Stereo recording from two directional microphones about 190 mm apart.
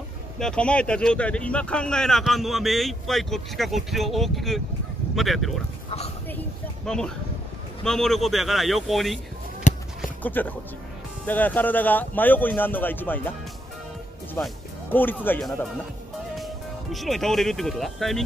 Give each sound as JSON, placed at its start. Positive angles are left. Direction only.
{"t": 0.4, "sound": "speech", "side_deg": 5}
{"t": 6.9, "sound": "speech", "side_deg": 5}
{"t": 9.6, "sound": "a sound", "side_deg": 45}
{"t": 10.2, "sound": "speech", "side_deg": 10}
{"t": 14.3, "sound": "speech", "side_deg": 10}
{"t": 16.9, "sound": "speech", "side_deg": 0}